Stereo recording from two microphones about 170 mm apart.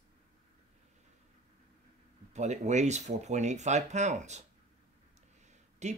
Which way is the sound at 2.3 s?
45° right (ahead or behind).